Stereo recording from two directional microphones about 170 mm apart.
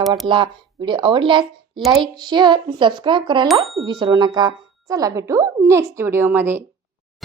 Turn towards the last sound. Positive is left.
turn(degrees=-10)  # may be behind; listen again after turning